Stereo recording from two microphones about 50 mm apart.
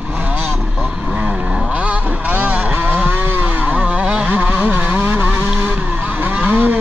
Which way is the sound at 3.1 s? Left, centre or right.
Right.